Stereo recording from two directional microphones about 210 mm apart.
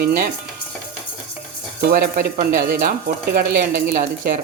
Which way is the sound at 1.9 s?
45° right (ahead or behind).